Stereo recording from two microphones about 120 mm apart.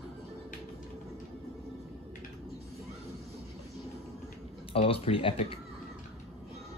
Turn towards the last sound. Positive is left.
turn(degrees=50)  # may be behind; listen again after turning